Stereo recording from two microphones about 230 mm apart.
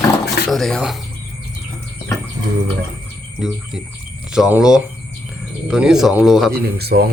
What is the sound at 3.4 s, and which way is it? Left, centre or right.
Speech, centre.